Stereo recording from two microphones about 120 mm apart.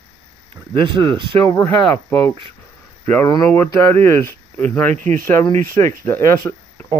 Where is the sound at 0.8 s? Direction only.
40° right (ahead or behind).